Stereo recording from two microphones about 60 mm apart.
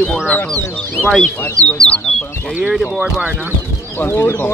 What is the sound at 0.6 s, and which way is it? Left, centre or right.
Speech, left.